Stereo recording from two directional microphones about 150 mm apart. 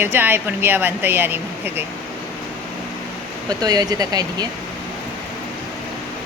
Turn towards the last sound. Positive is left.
turn(degrees=-25)  # may be behind; listen again after turning